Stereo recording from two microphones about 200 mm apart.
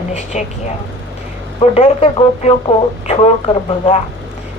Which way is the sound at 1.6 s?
30° left (ahead or behind).